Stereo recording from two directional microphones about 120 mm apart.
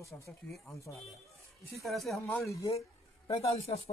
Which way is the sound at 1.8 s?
Centre (ahead or behind).